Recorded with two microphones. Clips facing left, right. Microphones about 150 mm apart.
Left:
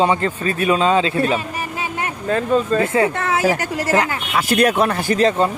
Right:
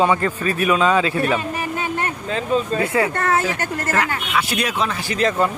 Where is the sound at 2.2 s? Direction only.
50° left (ahead or behind).